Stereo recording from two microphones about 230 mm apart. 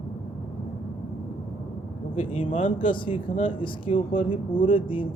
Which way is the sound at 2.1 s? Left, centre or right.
Left.